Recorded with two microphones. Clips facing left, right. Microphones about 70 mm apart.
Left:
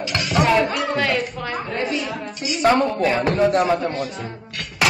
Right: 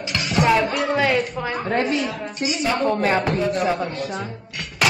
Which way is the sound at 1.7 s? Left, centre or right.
Right.